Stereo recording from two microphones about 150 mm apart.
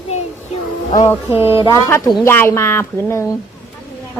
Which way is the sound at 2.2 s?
15° left (ahead or behind).